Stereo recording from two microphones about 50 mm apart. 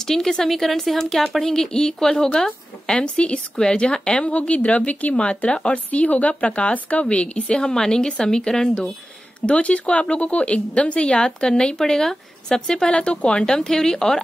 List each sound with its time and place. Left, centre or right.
0.0 s a woman's voice: centre
13.4 s speech: centre